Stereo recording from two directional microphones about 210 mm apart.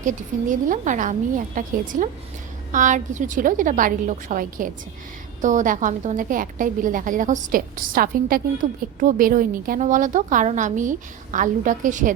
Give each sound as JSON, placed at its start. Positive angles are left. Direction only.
{"t": 0.0, "sound": "a woman's voice", "side_deg": -35}